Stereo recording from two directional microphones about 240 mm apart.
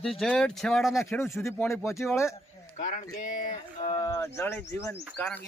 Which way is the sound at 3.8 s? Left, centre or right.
Centre.